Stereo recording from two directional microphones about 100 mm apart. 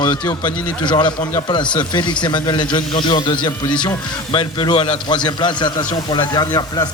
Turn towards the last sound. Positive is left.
turn(degrees=45)  # may be behind; listen again after turning